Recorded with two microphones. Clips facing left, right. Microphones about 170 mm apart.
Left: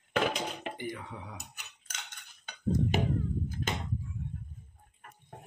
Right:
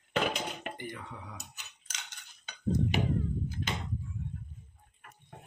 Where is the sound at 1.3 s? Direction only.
55° left (ahead or behind).